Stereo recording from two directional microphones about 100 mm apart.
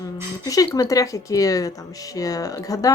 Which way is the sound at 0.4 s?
35° left (ahead or behind).